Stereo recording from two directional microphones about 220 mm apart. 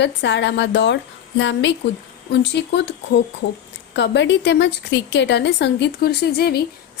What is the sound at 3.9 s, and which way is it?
A woman's voice, 55° left (ahead or behind).